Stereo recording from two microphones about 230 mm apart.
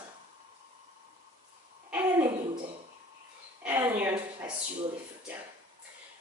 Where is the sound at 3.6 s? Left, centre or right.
Centre.